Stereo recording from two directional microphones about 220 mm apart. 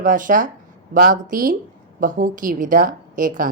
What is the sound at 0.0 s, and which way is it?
A woman's voice, 35° right (ahead or behind).